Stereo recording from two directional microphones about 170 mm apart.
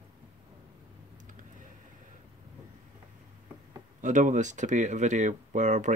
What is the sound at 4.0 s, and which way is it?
Speech, 45° right (ahead or behind).